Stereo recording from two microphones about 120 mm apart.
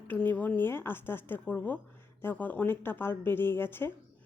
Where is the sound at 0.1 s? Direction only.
15° left (ahead or behind).